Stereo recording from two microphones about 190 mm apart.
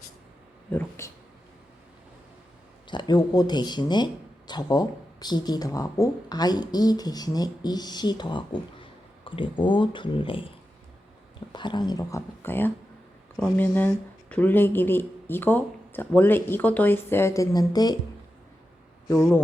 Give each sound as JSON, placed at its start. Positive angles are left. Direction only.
{"t": 0.7, "sound": "speech", "side_deg": 10}
{"t": 2.8, "sound": "speech", "side_deg": 25}
{"t": 11.5, "sound": "speech", "side_deg": 25}
{"t": 19.0, "sound": "speech", "side_deg": 15}